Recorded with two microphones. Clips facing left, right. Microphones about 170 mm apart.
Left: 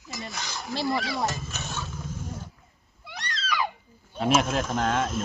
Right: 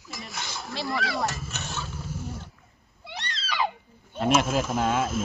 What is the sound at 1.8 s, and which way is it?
Roaring cats, 10° right (ahead or behind).